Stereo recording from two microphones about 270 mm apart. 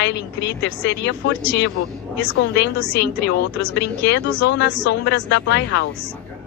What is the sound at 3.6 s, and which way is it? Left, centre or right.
Speech, left.